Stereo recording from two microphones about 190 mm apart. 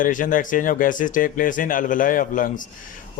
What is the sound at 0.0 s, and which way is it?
A man's voice, 45° left (ahead or behind).